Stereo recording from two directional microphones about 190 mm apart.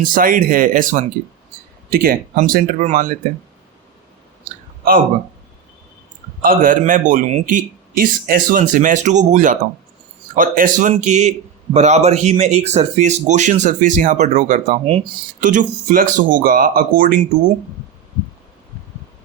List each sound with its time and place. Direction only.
0.0 s a man's voice: 45° right (ahead or behind)
6.4 s a man's voice: 45° right (ahead or behind)